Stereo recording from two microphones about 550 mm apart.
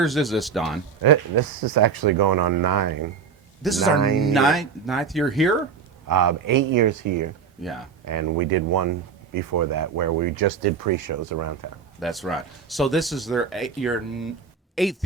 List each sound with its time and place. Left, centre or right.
0.0 s speech: centre
1.0 s speech: right
3.6 s speech: centre
6.1 s speech: right
7.6 s speech: centre
8.0 s speech: right
11.9 s speech: centre